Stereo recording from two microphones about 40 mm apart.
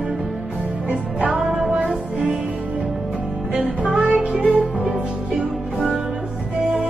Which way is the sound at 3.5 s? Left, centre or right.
Right.